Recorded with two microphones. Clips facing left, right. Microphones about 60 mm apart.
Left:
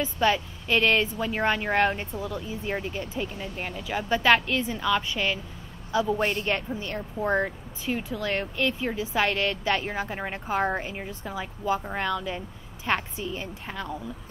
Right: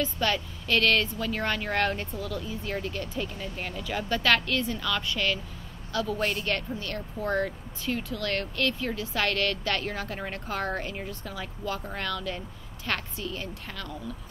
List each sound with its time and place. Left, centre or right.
0.0 s speech: centre